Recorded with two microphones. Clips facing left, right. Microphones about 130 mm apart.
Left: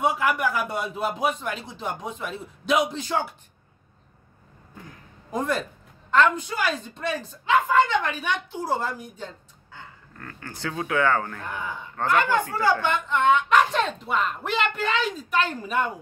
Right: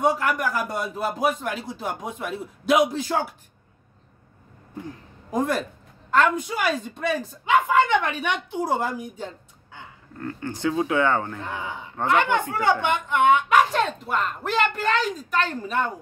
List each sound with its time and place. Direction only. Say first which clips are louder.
0.0 s a man's voice: right 1 dB; 5° left (ahead or behind)
5.3 s speech: right 2 dB; 5° right (ahead or behind)
10.1 s speech: right 9 dB; 20° right (ahead or behind); by 15.9 s 5° left (ahead or behind)